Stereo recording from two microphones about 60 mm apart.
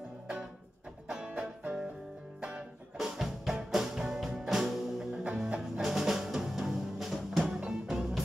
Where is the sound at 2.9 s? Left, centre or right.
Centre.